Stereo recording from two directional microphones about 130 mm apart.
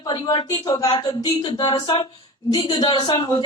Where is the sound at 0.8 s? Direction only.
40° left (ahead or behind).